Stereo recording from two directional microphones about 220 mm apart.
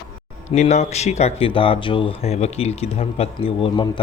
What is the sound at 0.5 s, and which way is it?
Speech, 30° left (ahead or behind).